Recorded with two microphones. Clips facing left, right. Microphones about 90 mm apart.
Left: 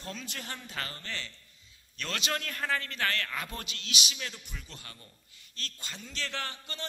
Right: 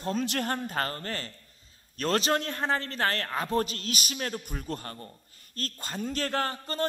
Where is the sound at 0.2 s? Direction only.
55° right (ahead or behind).